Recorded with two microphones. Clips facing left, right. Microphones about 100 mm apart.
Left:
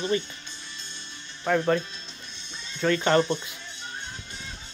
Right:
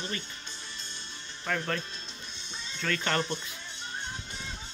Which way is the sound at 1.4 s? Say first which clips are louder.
Left 9 dB; 20° left (ahead or behind).